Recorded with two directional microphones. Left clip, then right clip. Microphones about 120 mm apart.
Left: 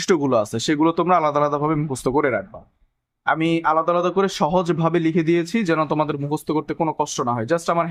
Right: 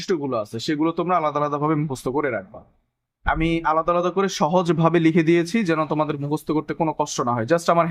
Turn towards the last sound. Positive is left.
turn(degrees=-15)  # may be behind; listen again after turning